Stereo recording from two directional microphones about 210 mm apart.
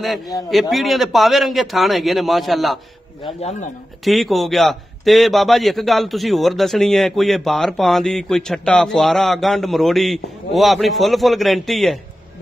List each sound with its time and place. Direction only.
0.5 s a man's voice: centre (ahead or behind)
3.3 s speech: 30° left (ahead or behind)
4.0 s a man's voice: centre (ahead or behind)